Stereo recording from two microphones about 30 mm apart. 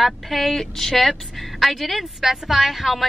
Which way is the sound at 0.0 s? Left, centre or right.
Centre.